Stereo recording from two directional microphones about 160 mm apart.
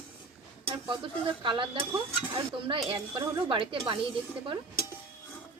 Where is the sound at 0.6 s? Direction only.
30° right (ahead or behind).